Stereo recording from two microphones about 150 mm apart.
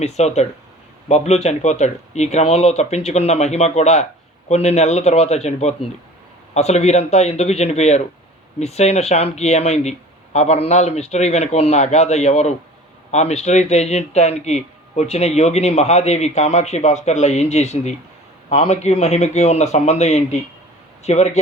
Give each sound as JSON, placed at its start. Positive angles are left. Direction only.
{"t": 0.0, "sound": "speech", "side_deg": 45}